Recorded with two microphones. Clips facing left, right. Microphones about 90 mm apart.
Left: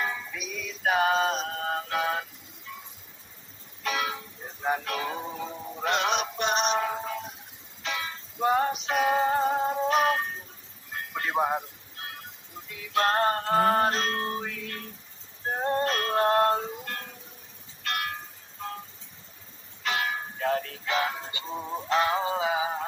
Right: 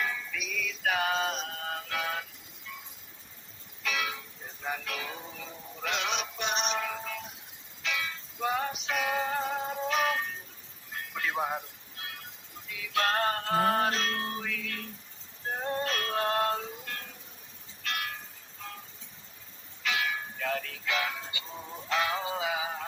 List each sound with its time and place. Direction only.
0.0 s music: 25° left (ahead or behind)
3.8 s music: 35° left (ahead or behind)
5.9 s synthetic singing: 45° left (ahead or behind); by 7.3 s 30° left (ahead or behind)
7.8 s music: 30° left (ahead or behind)
17.8 s a sound: 50° left (ahead or behind)
19.8 s music: 35° left (ahead or behind)